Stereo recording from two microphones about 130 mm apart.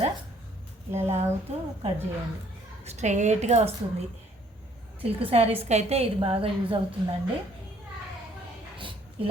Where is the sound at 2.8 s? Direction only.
65° right (ahead or behind).